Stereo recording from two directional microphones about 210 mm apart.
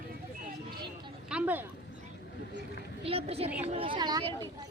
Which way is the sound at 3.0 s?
30° right (ahead or behind).